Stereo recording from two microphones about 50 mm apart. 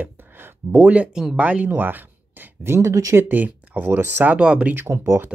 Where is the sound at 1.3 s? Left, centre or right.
Right.